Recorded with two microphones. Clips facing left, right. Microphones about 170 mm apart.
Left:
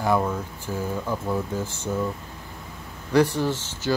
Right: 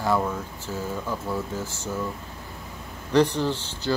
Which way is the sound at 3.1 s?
10° left (ahead or behind).